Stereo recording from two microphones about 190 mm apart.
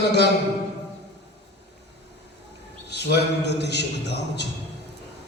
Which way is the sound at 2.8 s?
60° left (ahead or behind).